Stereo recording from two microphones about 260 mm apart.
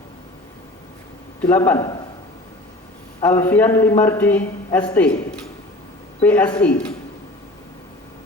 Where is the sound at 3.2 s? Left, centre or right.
Centre.